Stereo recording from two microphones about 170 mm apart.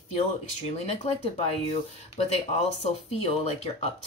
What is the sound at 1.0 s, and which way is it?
Speech, 40° left (ahead or behind).